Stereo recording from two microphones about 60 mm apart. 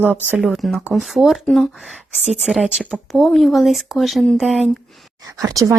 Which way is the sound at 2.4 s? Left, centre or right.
Centre.